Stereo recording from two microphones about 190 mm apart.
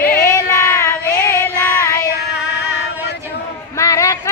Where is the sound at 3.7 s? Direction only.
15° left (ahead or behind).